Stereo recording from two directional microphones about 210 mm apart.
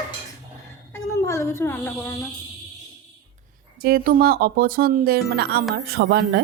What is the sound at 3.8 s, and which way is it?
Speech, 45° right (ahead or behind).